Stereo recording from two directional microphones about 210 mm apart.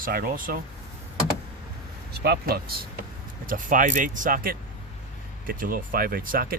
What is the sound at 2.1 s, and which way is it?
Speech, 50° right (ahead or behind).